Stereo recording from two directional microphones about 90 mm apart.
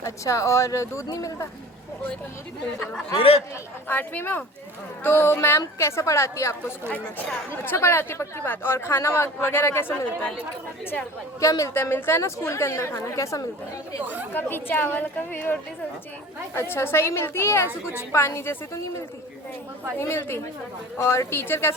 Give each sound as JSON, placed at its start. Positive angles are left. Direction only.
{"t": 0.0, "sound": "a woman's voice", "side_deg": 35}
{"t": 3.2, "sound": "speech", "side_deg": 90}
{"t": 3.8, "sound": "a woman's voice", "side_deg": 20}
{"t": 6.9, "sound": "speech", "side_deg": 15}
{"t": 7.5, "sound": "speech", "side_deg": 25}
{"t": 11.3, "sound": "a woman's voice", "side_deg": 35}
{"t": 11.7, "sound": "a woman's voice", "side_deg": 25}
{"t": 14.0, "sound": "speech", "side_deg": -20}
{"t": 14.3, "sound": "speech", "side_deg": 25}
{"t": 16.6, "sound": "a woman's voice", "side_deg": 25}